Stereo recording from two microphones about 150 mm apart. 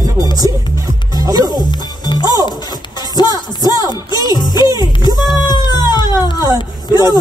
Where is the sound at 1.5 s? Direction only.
30° left (ahead or behind).